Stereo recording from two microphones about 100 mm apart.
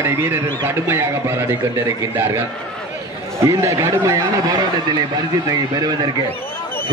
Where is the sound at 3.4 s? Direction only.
30° right (ahead or behind).